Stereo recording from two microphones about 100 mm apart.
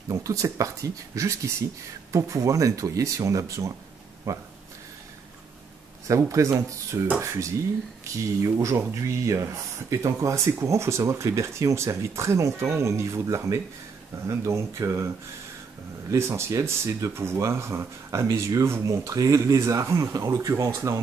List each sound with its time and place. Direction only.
0.1 s speech: 35° right (ahead or behind)
6.0 s speech: 30° right (ahead or behind)
16.1 s speech: 25° right (ahead or behind)